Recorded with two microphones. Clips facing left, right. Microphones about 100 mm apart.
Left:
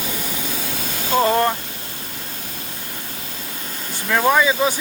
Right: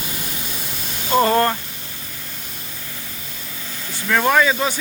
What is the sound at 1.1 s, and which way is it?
Speech, centre (ahead or behind).